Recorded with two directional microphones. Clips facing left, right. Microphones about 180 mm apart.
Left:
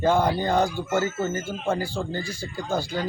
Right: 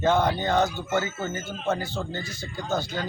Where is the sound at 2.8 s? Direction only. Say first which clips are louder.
Left 2 dB; 35° left (ahead or behind).